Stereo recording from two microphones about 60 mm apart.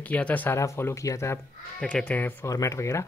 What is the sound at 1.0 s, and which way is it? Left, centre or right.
Speech, left.